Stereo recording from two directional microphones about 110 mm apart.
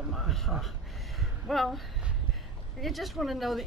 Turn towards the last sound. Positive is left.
turn(degrees=0)  # may be behind; listen again after turning